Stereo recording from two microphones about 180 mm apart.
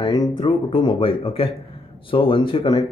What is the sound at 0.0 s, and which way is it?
A man's voice, 20° left (ahead or behind).